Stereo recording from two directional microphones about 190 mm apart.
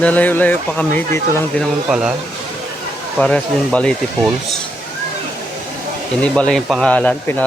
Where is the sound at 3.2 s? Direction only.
5° left (ahead or behind).